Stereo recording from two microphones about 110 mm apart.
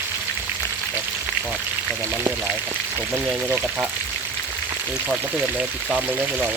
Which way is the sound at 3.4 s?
15° right (ahead or behind).